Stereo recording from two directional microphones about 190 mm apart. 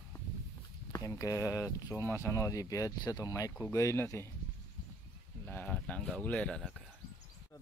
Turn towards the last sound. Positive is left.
turn(degrees=5)  # may be behind; listen again after turning